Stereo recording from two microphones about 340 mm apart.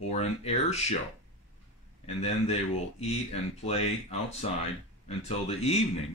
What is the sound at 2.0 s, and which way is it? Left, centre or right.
Speech, centre.